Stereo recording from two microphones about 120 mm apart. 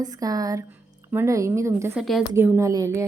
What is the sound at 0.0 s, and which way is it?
A woman's voice, 30° right (ahead or behind).